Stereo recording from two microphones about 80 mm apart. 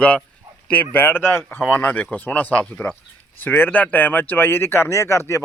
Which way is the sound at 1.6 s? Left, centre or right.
Centre.